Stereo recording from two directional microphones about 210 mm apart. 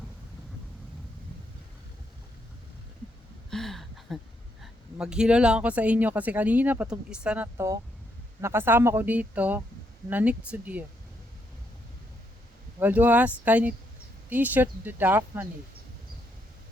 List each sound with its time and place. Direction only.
3.5 s a sound: centre (ahead or behind)
4.6 s speech: 5° right (ahead or behind)
12.8 s speech: 10° right (ahead or behind)